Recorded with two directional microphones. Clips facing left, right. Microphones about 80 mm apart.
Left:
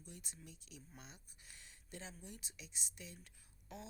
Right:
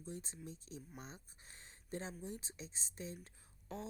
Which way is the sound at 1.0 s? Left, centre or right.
Right.